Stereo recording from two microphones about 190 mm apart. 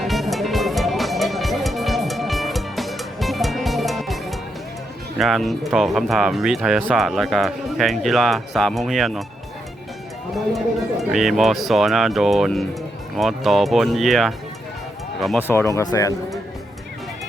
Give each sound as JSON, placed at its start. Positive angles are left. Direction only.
{"t": 0.0, "sound": "music", "side_deg": 0}
{"t": 5.1, "sound": "speech", "side_deg": 0}
{"t": 11.1, "sound": "speech", "side_deg": 0}
{"t": 15.4, "sound": "speech", "side_deg": 15}